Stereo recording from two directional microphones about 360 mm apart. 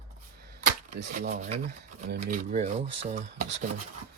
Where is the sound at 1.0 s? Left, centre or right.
Right.